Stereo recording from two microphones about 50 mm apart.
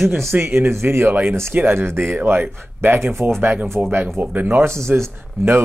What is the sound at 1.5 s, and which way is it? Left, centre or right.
Speech, right.